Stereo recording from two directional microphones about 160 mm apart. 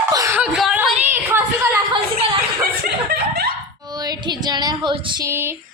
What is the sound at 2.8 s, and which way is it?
Chuckle, 75° right (ahead or behind).